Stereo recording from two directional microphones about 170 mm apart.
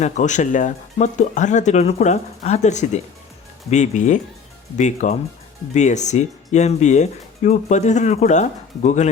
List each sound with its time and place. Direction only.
0.0 s speech: 45° left (ahead or behind)